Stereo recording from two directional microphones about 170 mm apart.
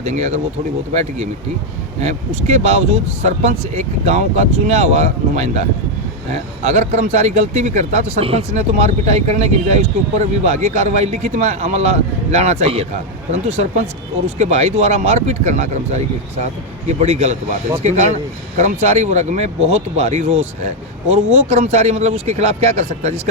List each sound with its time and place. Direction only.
0.0 s speech: 45° right (ahead or behind)
2.0 s speech: 40° right (ahead or behind)